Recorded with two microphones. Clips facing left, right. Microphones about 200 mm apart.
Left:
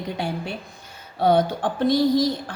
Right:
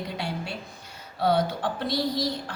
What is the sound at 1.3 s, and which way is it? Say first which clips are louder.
Speech: left 5 dB; 50° left (ahead or behind).